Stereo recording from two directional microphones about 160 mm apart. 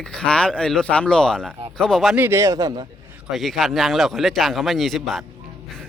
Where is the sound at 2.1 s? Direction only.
15° right (ahead or behind).